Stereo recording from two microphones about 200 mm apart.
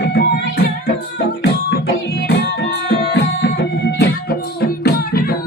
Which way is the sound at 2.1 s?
55° left (ahead or behind).